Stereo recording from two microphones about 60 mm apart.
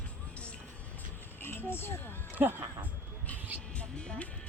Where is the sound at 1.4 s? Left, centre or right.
Left.